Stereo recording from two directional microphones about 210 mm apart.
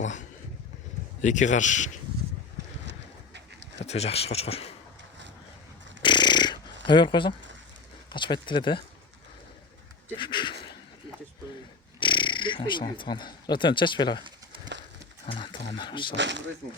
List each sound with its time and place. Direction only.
0.0 s vehicle: 35° left (ahead or behind)
1.2 s speech: 35° left (ahead or behind)
3.8 s speech: 30° left (ahead or behind)
6.0 s a sound: 20° left (ahead or behind)
6.8 s speech: 20° left (ahead or behind)
10.2 s a sound: 20° left (ahead or behind)
11.9 s a sound: 25° left (ahead or behind)
13.0 s speech: 20° left (ahead or behind)
15.3 s speech: 20° left (ahead or behind)
16.1 s speech: 60° right (ahead or behind)